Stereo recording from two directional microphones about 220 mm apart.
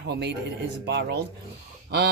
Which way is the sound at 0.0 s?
50° right (ahead or behind).